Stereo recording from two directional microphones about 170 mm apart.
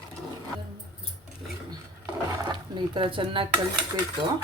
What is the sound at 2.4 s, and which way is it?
Dishes, 25° right (ahead or behind).